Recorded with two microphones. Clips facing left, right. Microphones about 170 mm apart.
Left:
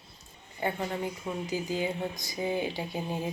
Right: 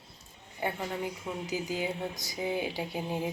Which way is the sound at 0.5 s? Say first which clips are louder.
Left 2 dB; 5° right (ahead or behind).